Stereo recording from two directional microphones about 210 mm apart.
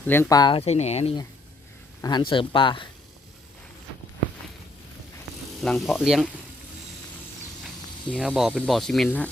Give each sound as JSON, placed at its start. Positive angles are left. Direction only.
{"t": 0.0, "sound": "speech", "side_deg": 10}
{"t": 5.5, "sound": "speech", "side_deg": 0}
{"t": 8.1, "sound": "speech", "side_deg": -5}